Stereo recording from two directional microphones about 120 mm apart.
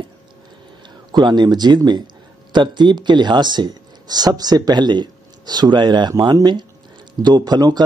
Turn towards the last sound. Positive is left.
turn(degrees=-35)  # may be behind; listen again after turning